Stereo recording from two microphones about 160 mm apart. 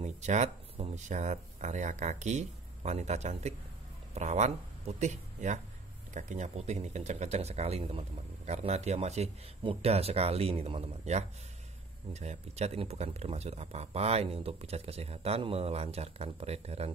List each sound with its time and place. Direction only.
0.0 s speech: 45° right (ahead or behind)